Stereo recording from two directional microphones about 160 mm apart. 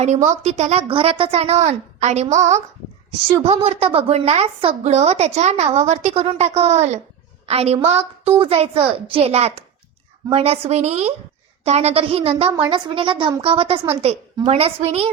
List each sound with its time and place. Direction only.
0.0 s a woman's voice: 45° right (ahead or behind)